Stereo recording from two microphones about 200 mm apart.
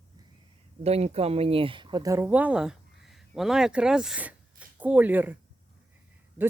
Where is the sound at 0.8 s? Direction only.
30° right (ahead or behind); by 5.4 s 10° right (ahead or behind).